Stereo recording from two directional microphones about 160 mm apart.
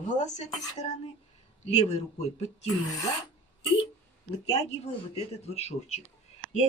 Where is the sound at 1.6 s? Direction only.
45° left (ahead or behind).